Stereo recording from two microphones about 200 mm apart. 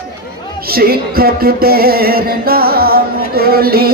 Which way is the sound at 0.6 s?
50° right (ahead or behind).